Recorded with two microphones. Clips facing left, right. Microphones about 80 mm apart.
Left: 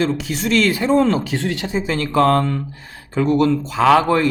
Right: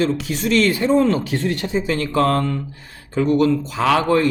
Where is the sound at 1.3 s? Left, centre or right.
Left.